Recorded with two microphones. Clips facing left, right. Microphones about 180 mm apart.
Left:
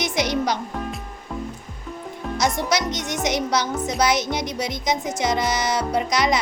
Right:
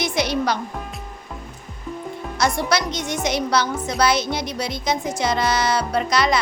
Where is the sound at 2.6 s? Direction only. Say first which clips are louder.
Right 1 dB; 20° left (ahead or behind).